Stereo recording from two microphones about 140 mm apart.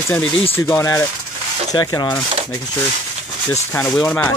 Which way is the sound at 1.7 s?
30° left (ahead or behind).